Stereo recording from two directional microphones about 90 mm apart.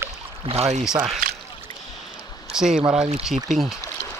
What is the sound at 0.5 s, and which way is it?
Speech, 90° right.